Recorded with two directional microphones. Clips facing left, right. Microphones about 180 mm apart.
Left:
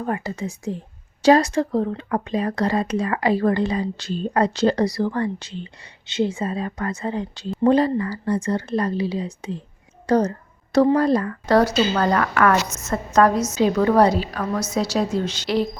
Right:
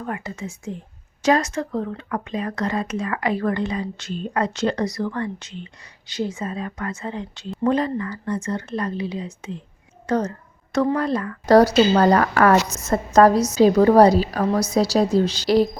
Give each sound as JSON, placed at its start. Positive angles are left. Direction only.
{"t": 0.0, "sound": "speech", "side_deg": 35}
{"t": 10.1, "sound": "a sound", "side_deg": 35}
{"t": 10.9, "sound": "speech", "side_deg": 35}
{"t": 11.4, "sound": "a woman's voice", "side_deg": -40}